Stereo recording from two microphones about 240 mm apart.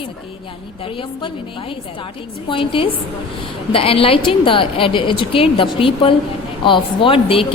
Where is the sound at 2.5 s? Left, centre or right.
Left.